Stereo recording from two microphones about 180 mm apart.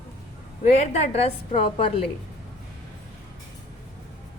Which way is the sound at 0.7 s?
40° left (ahead or behind).